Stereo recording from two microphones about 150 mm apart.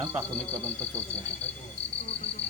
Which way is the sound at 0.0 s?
25° right (ahead or behind).